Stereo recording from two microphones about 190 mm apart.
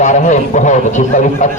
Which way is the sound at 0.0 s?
40° left (ahead or behind).